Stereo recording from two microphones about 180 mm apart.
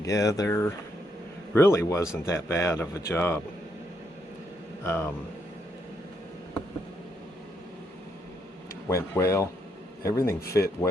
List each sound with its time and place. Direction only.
0.0 s speech: 20° left (ahead or behind)
4.8 s speech: 15° left (ahead or behind)
8.9 s speech: 15° left (ahead or behind)